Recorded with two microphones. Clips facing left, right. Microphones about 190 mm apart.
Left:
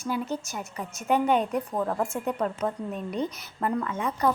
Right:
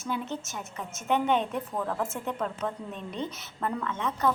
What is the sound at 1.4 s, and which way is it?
Speech, 40° left (ahead or behind).